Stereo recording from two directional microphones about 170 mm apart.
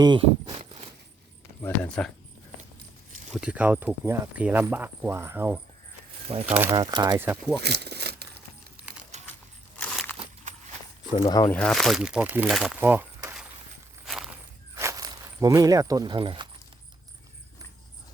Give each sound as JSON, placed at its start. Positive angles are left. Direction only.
{"t": 0.0, "sound": "speech", "side_deg": -30}
{"t": 1.6, "sound": "speech", "side_deg": 5}
{"t": 3.3, "sound": "speech", "side_deg": -5}
{"t": 6.2, "sound": "speech", "side_deg": -35}
{"t": 6.5, "sound": "speech", "side_deg": -15}
{"t": 7.6, "sound": "a sound", "side_deg": -75}
{"t": 9.7, "sound": "a sound", "side_deg": 10}
{"t": 11.3, "sound": "speech", "side_deg": 20}
{"t": 11.5, "sound": "speech", "side_deg": 5}
{"t": 12.8, "sound": "a sound", "side_deg": -10}
{"t": 14.0, "sound": "walk", "side_deg": 0}
{"t": 14.8, "sound": "walk", "side_deg": -20}